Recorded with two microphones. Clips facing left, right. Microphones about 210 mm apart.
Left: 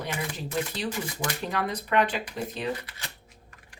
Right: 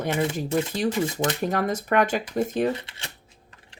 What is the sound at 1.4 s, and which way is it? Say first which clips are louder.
Speech: right 6 dB; 45° right (ahead or behind).